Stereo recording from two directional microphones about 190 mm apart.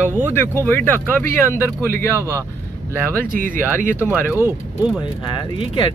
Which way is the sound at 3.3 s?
45° right (ahead or behind).